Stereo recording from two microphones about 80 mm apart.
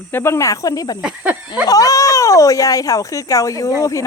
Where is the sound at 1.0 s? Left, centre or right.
Centre.